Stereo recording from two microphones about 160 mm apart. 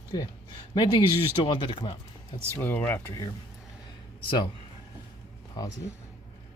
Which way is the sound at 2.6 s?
15° left (ahead or behind).